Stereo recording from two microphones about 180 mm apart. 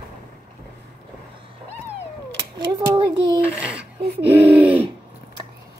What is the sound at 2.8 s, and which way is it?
Child singing, 25° right (ahead or behind).